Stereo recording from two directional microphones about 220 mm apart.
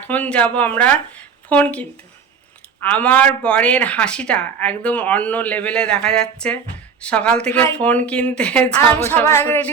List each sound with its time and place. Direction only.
0.1 s a woman's voice: 5° left (ahead or behind)